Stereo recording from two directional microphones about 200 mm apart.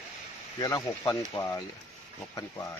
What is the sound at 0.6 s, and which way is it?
Speech, 20° left (ahead or behind).